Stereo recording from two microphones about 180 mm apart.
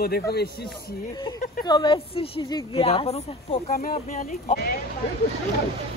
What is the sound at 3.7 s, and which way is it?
Speech, 50° left (ahead or behind).